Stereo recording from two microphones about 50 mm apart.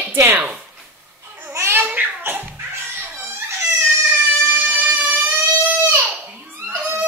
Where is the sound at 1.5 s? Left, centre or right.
Right.